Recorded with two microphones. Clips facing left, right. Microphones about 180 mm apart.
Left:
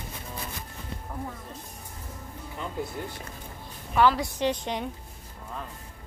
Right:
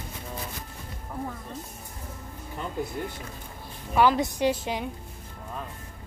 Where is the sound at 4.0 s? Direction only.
15° right (ahead or behind).